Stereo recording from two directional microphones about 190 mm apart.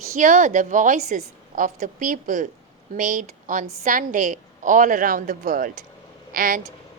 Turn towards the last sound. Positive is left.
turn(degrees=-45)  # may be behind; listen again after turning